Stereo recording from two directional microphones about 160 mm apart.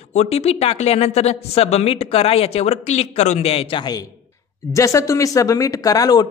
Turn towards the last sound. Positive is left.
turn(degrees=25)  # may be behind; listen again after turning